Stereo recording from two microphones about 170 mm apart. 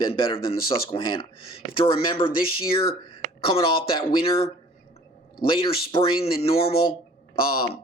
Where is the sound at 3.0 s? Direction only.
30° left (ahead or behind).